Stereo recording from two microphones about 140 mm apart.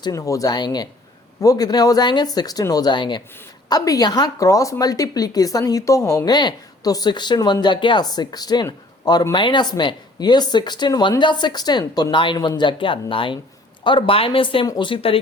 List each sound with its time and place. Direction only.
0.0 s speech: 25° left (ahead or behind)